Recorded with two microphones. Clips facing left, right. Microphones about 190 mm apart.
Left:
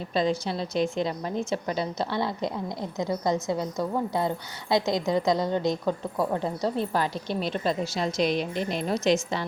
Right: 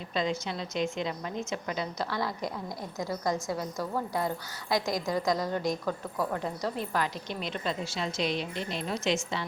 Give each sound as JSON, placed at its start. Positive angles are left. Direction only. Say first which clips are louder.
{"t": 0.1, "sound": "a woman's voice", "louder": "left 5 dB", "side_deg": 35}